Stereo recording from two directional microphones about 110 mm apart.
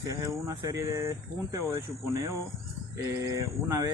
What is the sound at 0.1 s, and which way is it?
Speech, 30° right (ahead or behind).